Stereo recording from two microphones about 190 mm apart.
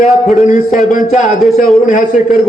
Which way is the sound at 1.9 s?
45° left (ahead or behind).